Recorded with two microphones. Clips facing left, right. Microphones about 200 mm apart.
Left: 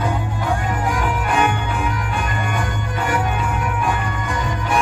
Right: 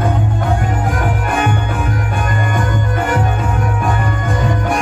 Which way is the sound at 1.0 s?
50° right (ahead or behind).